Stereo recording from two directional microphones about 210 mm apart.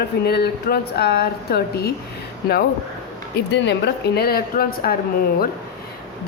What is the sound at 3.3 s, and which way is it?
Speech, 55° left (ahead or behind).